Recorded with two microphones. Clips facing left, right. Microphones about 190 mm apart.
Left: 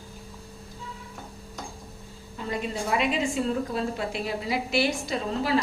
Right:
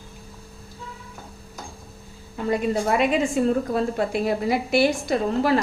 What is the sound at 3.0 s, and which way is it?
A woman's voice, 50° right (ahead or behind).